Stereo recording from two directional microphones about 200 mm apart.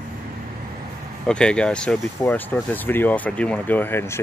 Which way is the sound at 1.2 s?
5° left (ahead or behind).